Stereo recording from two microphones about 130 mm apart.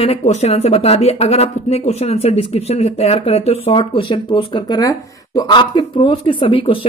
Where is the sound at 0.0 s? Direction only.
55° left (ahead or behind).